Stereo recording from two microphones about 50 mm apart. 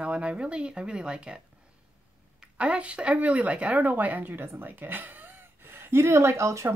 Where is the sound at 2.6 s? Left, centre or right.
Right.